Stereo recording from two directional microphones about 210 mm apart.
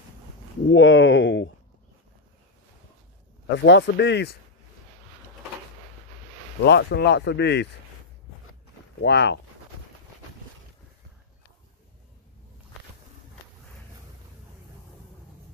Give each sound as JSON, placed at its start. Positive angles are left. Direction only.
{"t": 0.7, "sound": "speech", "side_deg": 65}
{"t": 3.5, "sound": "speech", "side_deg": 60}
{"t": 6.6, "sound": "speech", "side_deg": 55}
{"t": 9.0, "sound": "speech", "side_deg": 55}